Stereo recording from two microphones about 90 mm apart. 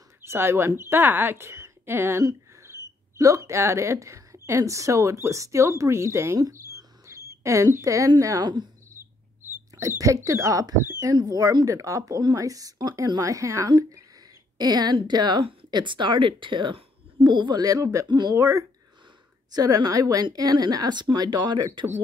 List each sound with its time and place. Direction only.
0.2 s speech: 25° right (ahead or behind)
2.6 s a sound: 35° right (ahead or behind)
4.5 s speech: 35° right (ahead or behind)
6.4 s a sound: 40° right (ahead or behind)
8.2 s speech: 35° right (ahead or behind)
9.8 s speech: 35° right (ahead or behind)
18.3 s speech: 35° right (ahead or behind); by 21.6 s 50° right (ahead or behind)